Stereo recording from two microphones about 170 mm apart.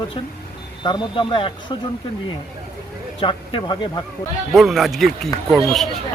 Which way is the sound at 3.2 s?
30° left (ahead or behind).